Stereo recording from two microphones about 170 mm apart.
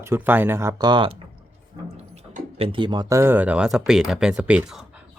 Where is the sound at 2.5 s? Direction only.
35° right (ahead or behind).